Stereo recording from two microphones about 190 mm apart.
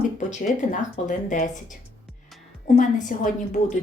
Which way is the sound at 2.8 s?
40° left (ahead or behind).